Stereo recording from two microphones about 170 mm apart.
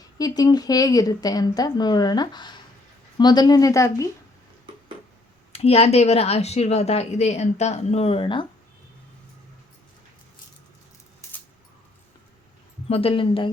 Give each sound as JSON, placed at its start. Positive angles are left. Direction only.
{"t": 0.2, "sound": "speech", "side_deg": 20}
{"t": 5.5, "sound": "speech", "side_deg": 35}
{"t": 12.9, "sound": "speech", "side_deg": 35}